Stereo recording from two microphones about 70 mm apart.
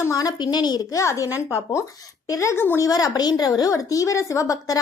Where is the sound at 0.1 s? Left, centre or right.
Left.